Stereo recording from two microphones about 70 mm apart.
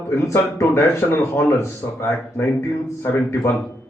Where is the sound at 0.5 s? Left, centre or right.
Left.